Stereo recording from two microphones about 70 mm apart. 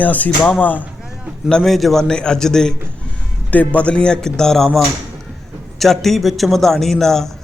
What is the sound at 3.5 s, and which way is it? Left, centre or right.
A man's voice, left.